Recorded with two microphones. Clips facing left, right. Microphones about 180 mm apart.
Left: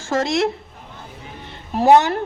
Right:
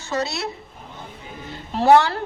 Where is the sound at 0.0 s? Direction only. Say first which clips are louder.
Left 6 dB; 90° left.